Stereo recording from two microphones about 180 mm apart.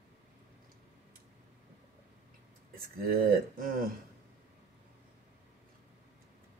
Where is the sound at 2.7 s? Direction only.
55° right (ahead or behind).